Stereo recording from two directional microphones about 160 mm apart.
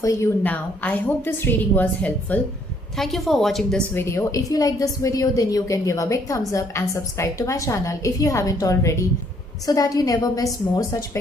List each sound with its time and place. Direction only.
0.0 s a woman's voice: 20° left (ahead or behind)
3.9 s a woman's voice: 15° left (ahead or behind)